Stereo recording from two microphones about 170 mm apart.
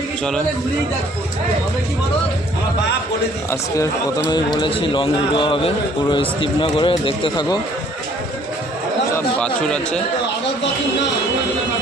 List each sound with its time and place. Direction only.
4.3 s a man's voice: 25° left (ahead or behind)
9.1 s speech: 5° left (ahead or behind)